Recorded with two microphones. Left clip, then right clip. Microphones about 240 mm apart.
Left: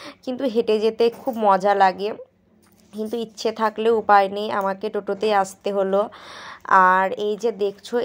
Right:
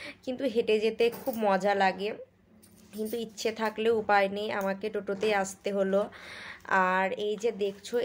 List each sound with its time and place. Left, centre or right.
0.0 s speech: left